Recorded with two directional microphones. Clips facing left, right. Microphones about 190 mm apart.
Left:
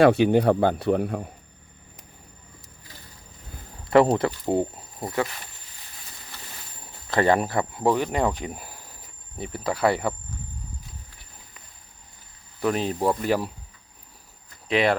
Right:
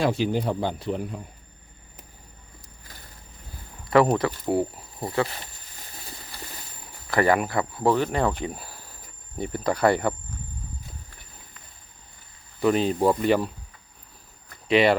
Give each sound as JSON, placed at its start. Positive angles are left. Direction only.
{"t": 0.0, "sound": "speech", "side_deg": 65}
{"t": 3.8, "sound": "speech", "side_deg": 25}
{"t": 7.1, "sound": "speech", "side_deg": 20}
{"t": 9.4, "sound": "speech", "side_deg": 5}
{"t": 12.5, "sound": "speech", "side_deg": 0}
{"t": 14.7, "sound": "speech", "side_deg": 0}